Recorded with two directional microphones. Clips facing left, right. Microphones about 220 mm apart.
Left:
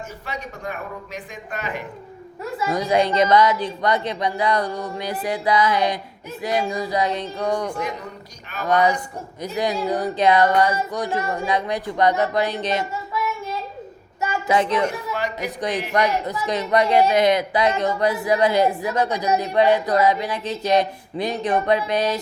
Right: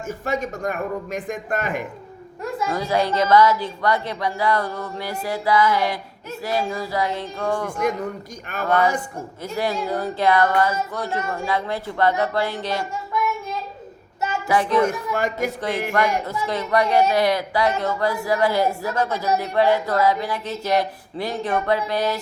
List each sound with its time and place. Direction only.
0.1 s speech: 45° right (ahead or behind)
2.4 s female singing: 5° left (ahead or behind)
2.7 s a woman's voice: 20° left (ahead or behind)
8.6 s female singing: 15° left (ahead or behind)
14.4 s a woman's voice: 20° left (ahead or behind)
14.8 s speech: 50° right (ahead or behind)
16.0 s a woman's voice: 20° left (ahead or behind)